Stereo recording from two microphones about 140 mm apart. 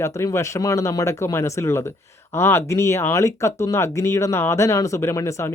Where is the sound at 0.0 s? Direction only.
20° left (ahead or behind).